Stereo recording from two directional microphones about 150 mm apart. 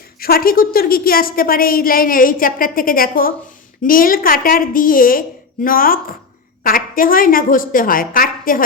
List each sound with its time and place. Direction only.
0.2 s a woman's voice: 80° left